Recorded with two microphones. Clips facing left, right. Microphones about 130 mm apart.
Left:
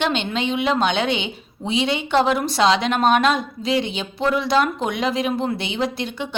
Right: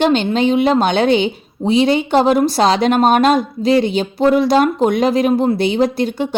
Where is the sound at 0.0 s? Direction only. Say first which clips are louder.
Right 8 dB; 40° right (ahead or behind).